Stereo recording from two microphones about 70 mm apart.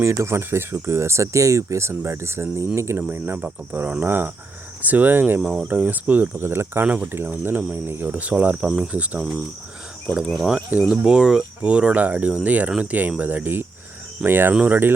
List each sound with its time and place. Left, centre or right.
0.0 s speech: right
2.7 s cricket: right
3.2 s speech: right
5.4 s speech: centre
5.6 s speech: right
6.4 s speech: right
6.8 s speech: centre
7.1 s speech: right
10.3 s speech: centre; by 14.5 s right
14.5 s speech: centre